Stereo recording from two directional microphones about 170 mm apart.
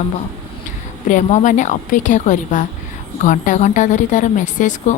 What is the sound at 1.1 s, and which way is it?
A woman's voice, 45° left (ahead or behind).